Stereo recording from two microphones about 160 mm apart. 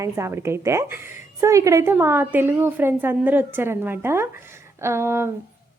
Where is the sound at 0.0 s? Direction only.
15° right (ahead or behind).